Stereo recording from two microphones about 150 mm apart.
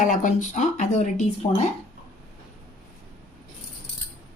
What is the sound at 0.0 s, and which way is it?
Speech, 60° left (ahead or behind).